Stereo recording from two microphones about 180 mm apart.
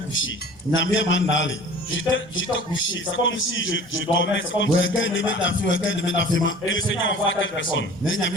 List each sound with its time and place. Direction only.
0.1 s a man's voice: 90° left